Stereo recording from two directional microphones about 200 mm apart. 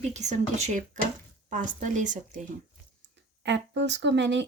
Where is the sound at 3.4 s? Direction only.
60° right (ahead or behind).